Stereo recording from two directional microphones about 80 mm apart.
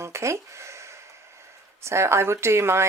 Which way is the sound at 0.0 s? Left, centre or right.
Right.